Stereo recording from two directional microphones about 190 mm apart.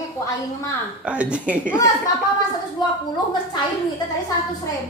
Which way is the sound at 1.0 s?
5° right (ahead or behind).